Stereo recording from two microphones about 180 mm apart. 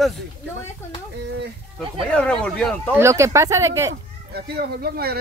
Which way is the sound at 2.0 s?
5° left (ahead or behind).